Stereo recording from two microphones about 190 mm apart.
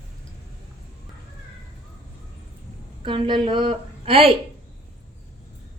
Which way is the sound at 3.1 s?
25° right (ahead or behind).